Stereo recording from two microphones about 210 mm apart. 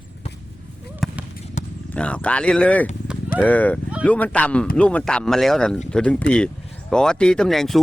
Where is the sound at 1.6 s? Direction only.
35° left (ahead or behind).